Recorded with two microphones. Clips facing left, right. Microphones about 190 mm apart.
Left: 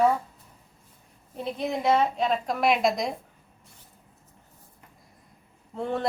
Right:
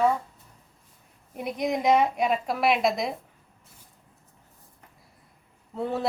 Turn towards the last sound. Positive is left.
turn(degrees=-5)  # may be behind; listen again after turning